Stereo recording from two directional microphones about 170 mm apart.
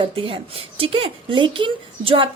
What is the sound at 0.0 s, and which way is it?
A woman's voice, 35° right (ahead or behind).